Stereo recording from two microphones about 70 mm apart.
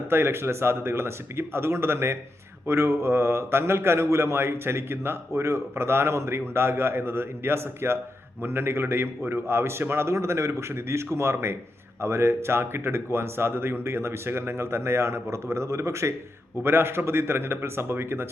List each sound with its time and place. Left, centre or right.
0.1 s speech: right